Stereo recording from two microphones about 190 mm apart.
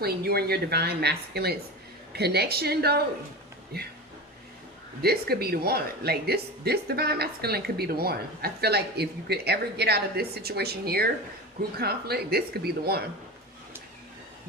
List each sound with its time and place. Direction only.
0.0 s speech: 55° right (ahead or behind)
5.0 s speech: 55° right (ahead or behind)